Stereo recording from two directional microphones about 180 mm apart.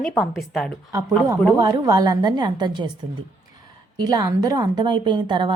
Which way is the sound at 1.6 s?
20° right (ahead or behind).